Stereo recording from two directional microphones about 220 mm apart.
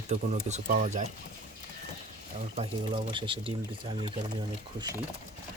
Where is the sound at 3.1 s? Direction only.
20° right (ahead or behind).